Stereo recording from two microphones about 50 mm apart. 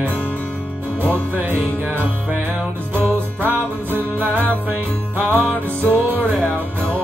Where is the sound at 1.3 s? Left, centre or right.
Right.